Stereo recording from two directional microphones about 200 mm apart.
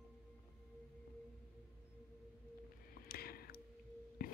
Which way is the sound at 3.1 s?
50° left (ahead or behind).